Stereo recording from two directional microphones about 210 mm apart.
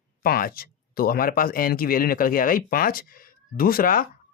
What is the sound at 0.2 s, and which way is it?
Speech, 45° left (ahead or behind).